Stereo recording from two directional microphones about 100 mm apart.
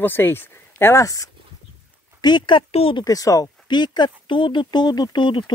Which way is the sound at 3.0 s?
35° left (ahead or behind).